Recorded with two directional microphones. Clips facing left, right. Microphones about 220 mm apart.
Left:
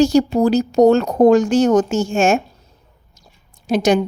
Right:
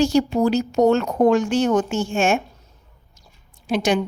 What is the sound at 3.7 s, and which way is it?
Speech, 40° left (ahead or behind).